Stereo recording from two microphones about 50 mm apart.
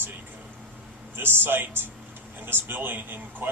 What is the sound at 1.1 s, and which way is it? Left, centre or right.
A man's voice, right.